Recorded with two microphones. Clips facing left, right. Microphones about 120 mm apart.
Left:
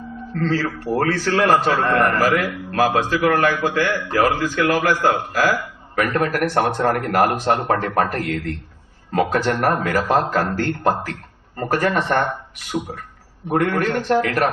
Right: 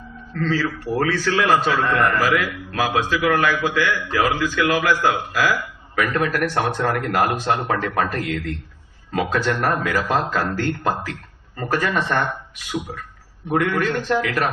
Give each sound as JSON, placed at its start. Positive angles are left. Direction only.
{"t": 0.3, "sound": "a man's voice", "side_deg": 40}